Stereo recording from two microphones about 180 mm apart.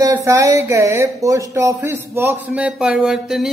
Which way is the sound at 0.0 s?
15° right (ahead or behind).